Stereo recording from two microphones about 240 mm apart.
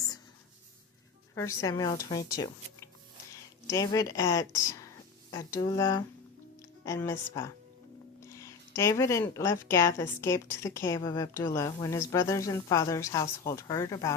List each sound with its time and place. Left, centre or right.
1.4 s speech: centre